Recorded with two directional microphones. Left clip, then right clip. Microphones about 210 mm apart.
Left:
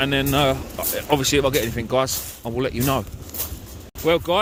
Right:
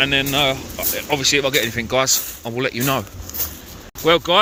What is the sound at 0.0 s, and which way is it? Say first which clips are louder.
Speech: right 3 dB; 25° left (ahead or behind).